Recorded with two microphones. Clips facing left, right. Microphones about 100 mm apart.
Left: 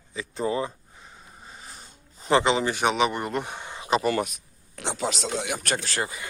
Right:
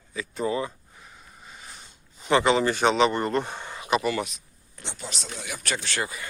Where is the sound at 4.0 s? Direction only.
40° left (ahead or behind).